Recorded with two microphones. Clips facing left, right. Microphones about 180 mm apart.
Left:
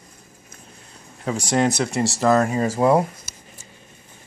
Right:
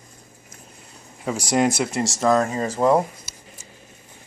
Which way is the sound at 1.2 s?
10° right (ahead or behind).